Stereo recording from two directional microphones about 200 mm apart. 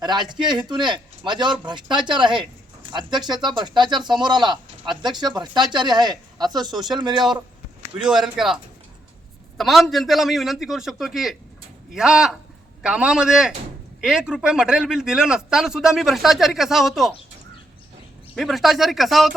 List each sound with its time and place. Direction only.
0.0 s speech: 20° right (ahead or behind)
8.0 s a man's voice: 5° right (ahead or behind)
9.6 s a man's voice: centre (ahead or behind)
18.3 s a man's voice: centre (ahead or behind)